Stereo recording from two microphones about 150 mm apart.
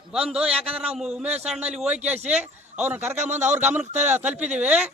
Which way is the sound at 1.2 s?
45° right (ahead or behind).